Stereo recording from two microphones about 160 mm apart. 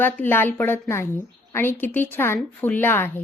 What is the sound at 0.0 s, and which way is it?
A woman's voice, 15° left (ahead or behind).